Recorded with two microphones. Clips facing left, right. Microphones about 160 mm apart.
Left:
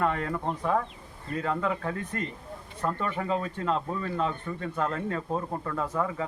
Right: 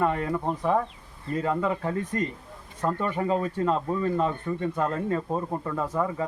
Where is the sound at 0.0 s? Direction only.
10° right (ahead or behind).